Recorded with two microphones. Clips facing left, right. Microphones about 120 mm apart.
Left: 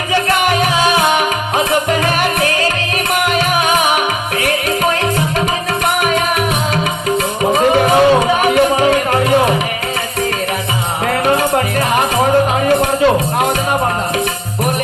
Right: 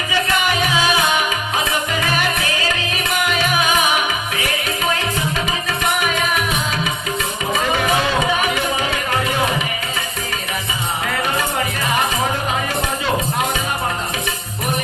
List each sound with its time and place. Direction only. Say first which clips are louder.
0.1 s music: left 6 dB; 55° left (ahead or behind)
7.5 s music: left 7 dB; 45° left (ahead or behind)